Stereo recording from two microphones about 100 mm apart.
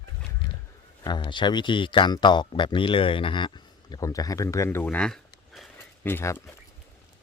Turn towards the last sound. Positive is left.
turn(degrees=25)  # may be behind; listen again after turning